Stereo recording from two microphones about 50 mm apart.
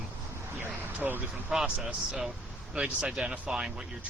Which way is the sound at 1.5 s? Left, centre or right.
Centre.